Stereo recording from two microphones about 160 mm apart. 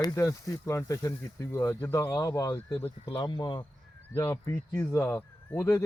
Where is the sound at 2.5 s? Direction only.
10° left (ahead or behind).